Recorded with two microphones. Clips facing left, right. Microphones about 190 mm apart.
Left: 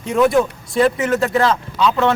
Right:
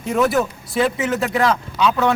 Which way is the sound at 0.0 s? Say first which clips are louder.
Left 3 dB; centre (ahead or behind).